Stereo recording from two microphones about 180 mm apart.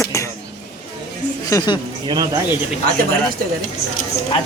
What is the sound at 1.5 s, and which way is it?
Speech, 20° left (ahead or behind).